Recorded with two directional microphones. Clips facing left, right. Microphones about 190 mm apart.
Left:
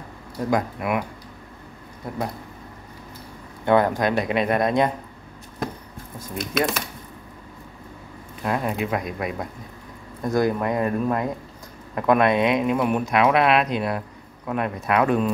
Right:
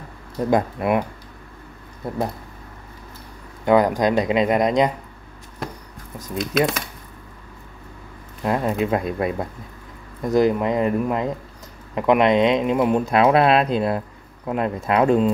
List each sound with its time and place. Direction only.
0.5 s speech: 30° right (ahead or behind)
3.6 s speech: 15° right (ahead or behind)
6.1 s speech: 15° right (ahead or behind)
8.5 s speech: 25° right (ahead or behind)